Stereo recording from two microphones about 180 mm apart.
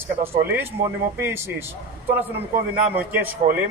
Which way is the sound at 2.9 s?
10° right (ahead or behind).